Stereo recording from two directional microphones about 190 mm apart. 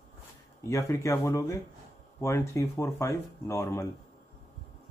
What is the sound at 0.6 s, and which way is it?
Speech, 15° left (ahead or behind).